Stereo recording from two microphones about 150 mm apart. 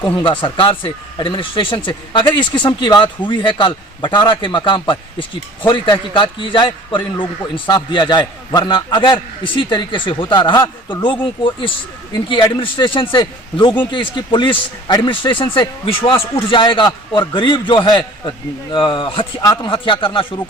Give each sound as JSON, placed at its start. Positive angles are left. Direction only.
{"t": 0.2, "sound": "speech", "side_deg": 35}
{"t": 12.1, "sound": "speech", "side_deg": 35}